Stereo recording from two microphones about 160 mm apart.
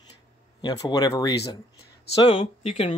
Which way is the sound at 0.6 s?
25° left (ahead or behind).